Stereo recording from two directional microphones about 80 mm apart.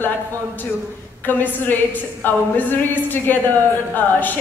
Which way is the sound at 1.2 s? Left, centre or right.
Left.